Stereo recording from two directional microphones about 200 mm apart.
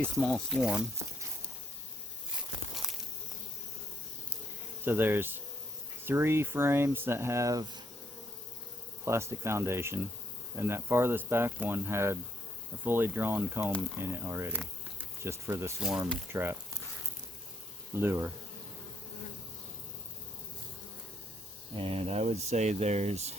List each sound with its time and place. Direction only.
0.2 s speech: centre (ahead or behind)
2.8 s walk: centre (ahead or behind)
4.9 s speech: 10° right (ahead or behind)
9.0 s speech: 15° right (ahead or behind)
14.6 s insect: 10° right (ahead or behind)
15.8 s speech: 5° right (ahead or behind)
17.9 s speech: 10° right (ahead or behind)
21.8 s speech: 30° right (ahead or behind)